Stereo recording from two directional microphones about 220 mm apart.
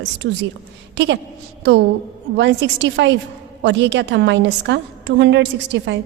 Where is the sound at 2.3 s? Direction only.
50° right (ahead or behind).